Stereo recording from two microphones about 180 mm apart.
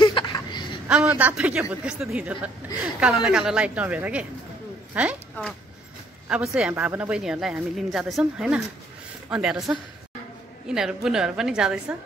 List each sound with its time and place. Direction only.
0.0 s a sound: 25° left (ahead or behind)
0.8 s speech: 5° right (ahead or behind)
6.2 s speech: 5° right (ahead or behind)